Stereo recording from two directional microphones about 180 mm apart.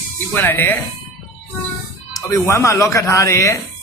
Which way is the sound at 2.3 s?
15° left (ahead or behind).